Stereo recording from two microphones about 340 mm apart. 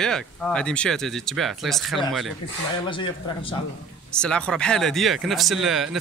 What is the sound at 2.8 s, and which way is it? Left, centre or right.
Speech, centre.